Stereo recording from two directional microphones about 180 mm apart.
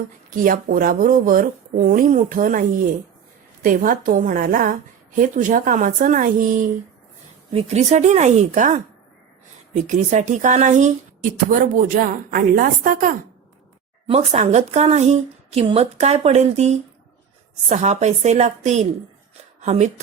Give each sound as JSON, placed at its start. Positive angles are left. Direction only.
{"t": 0.3, "sound": "a woman's voice", "side_deg": -50}
{"t": 14.1, "sound": "a woman's voice", "side_deg": -40}